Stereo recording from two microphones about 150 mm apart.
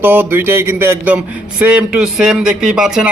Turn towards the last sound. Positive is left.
turn(degrees=-5)  # may be behind; listen again after turning